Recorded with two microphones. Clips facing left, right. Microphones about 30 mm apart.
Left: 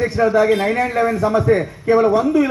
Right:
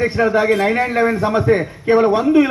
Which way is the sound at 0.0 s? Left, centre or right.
Right.